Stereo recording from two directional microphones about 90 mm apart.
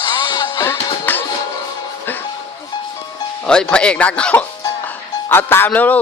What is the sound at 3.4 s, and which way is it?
Speech, 10° left (ahead or behind).